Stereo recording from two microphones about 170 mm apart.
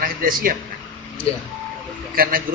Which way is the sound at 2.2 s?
55° right (ahead or behind).